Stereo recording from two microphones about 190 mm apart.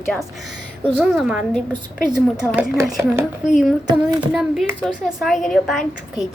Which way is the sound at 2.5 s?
5° right (ahead or behind).